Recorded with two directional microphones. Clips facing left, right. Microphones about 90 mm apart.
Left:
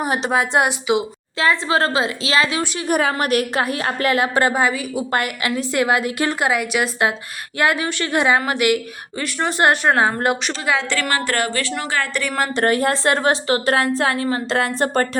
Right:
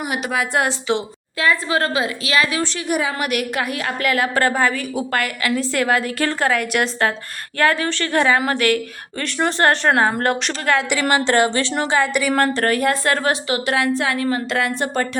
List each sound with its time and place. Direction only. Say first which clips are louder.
0.0 s a woman's voice: left 3 dB; 30° left (ahead or behind)
0.9 s a woman's voice: left 2 dB; 10° left (ahead or behind)
1.4 s a woman's voice: left 1 dB; 25° left (ahead or behind)
2.8 s a woman's voice: left 5 dB; 45° left (ahead or behind)
3.2 s a woman's voice: left 3 dB; 35° left (ahead or behind); by 5.0 s 5° left (ahead or behind)
5.1 s a woman's voice: even; 20° left (ahead or behind); by 10.8 s centre (ahead or behind)
11.3 s a woman's voice: right 5 dB; 25° right (ahead or behind)
12.5 s a woman's voice: left 1 dB; 25° left (ahead or behind)